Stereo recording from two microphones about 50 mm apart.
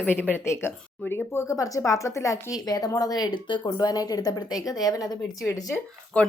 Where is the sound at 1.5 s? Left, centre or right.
Left.